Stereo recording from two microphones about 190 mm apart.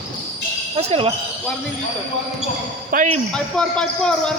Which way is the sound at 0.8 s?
30° right (ahead or behind).